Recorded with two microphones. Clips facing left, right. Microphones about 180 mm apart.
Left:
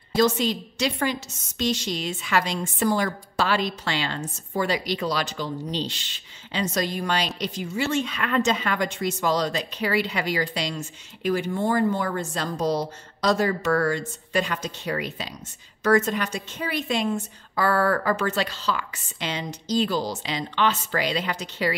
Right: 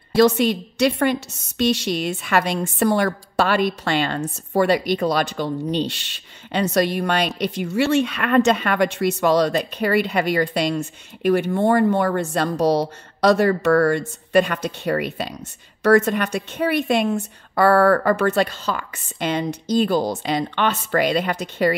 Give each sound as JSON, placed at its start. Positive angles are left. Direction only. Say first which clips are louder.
{"t": 0.1, "sound": "a woman's voice", "louder": "right 6 dB", "side_deg": -60}